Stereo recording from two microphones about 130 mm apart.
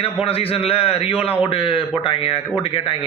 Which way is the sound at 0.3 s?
45° left (ahead or behind).